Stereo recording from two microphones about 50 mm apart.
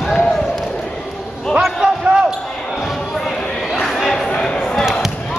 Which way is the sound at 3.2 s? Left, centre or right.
Centre.